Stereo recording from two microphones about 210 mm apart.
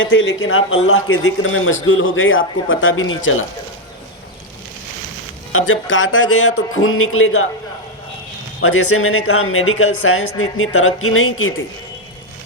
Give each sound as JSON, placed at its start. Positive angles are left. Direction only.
{"t": 0.0, "sound": "speech", "side_deg": 70}
{"t": 5.5, "sound": "speech", "side_deg": 75}
{"t": 8.6, "sound": "speech", "side_deg": 75}